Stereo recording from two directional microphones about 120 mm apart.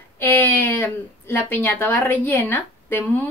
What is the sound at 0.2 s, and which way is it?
A woman's voice, 15° left (ahead or behind).